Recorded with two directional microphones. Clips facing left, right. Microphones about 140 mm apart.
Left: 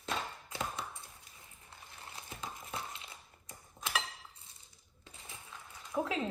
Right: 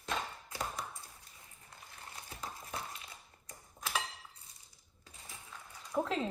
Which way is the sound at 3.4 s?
25° left (ahead or behind).